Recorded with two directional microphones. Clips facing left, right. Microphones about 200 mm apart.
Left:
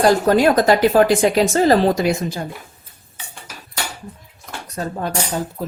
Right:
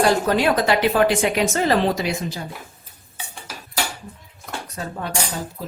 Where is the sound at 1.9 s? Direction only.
50° left (ahead or behind).